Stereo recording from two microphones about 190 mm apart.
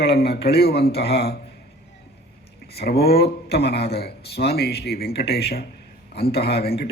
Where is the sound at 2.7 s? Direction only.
55° left (ahead or behind).